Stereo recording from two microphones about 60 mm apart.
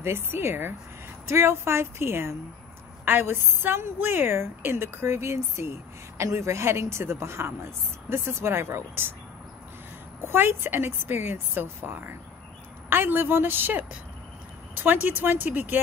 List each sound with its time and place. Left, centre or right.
0.0 s a woman's voice: right
10.2 s speech: right